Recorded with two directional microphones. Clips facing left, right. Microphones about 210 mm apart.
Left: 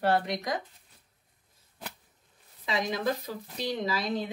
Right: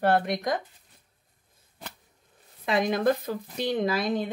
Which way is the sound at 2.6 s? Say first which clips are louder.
Right 6 dB; 55° right (ahead or behind).